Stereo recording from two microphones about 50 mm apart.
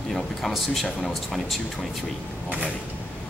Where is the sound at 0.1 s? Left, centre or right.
Centre.